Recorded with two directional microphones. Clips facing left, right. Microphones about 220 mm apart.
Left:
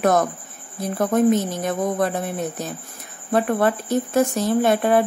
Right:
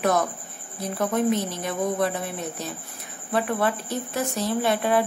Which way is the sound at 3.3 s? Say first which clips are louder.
Left 5 dB; 50° left (ahead or behind).